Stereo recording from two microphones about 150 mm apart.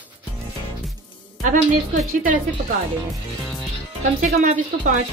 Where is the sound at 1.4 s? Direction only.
60° right (ahead or behind).